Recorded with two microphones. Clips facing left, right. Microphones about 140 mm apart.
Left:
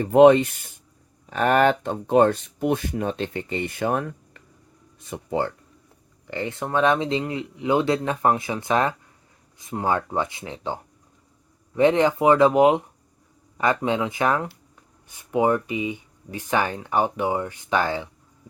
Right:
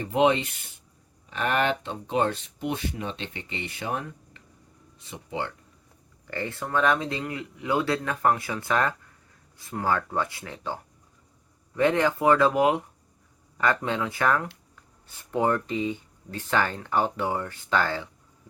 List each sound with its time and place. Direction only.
0.0 s speech: 50° left (ahead or behind)
6.2 s speech: 20° left (ahead or behind)
11.8 s speech: 20° left (ahead or behind)